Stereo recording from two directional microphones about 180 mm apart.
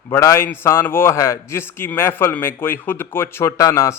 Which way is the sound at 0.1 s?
15° left (ahead or behind).